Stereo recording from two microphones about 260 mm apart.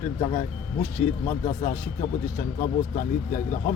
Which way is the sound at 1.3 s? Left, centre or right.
Left.